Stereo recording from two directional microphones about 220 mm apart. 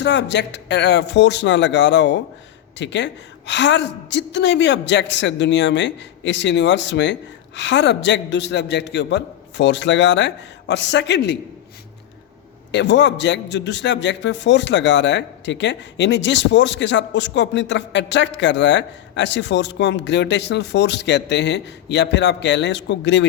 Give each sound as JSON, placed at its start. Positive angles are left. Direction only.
{"t": 0.0, "sound": "a man's voice", "side_deg": 50}
{"t": 12.7, "sound": "a man's voice", "side_deg": 55}